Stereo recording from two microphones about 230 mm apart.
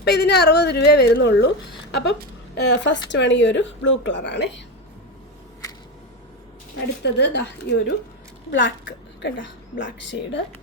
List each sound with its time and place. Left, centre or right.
0.0 s speech: left
7.0 s speech: left